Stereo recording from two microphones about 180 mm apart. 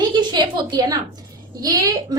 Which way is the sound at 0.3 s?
25° right (ahead or behind).